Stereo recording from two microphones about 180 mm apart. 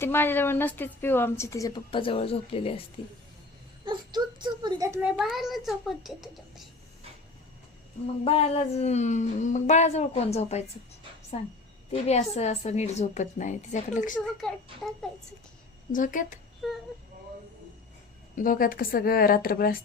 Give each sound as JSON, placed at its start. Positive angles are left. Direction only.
{"t": 0.0, "sound": "a woman's voice", "side_deg": 10}
{"t": 3.8, "sound": "a child's voice", "side_deg": -25}
{"t": 5.1, "sound": "a child's voice", "side_deg": 0}
{"t": 8.2, "sound": "a woman's voice", "side_deg": 35}
{"t": 14.4, "sound": "a child's voice", "side_deg": 5}
{"t": 15.9, "sound": "a woman's voice", "side_deg": 45}
{"t": 16.6, "sound": "a sound", "side_deg": 0}
{"t": 18.3, "sound": "a woman's voice", "side_deg": 50}